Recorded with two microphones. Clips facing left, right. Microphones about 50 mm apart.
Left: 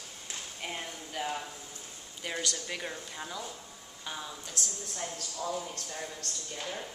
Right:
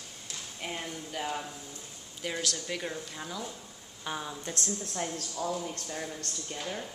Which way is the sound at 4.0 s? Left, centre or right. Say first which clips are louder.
Right 4 dB; centre.